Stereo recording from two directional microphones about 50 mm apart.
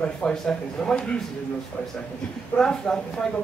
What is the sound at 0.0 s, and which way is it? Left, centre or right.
A woman's voice, centre.